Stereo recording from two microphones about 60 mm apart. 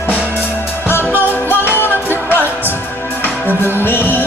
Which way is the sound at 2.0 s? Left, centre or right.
Right.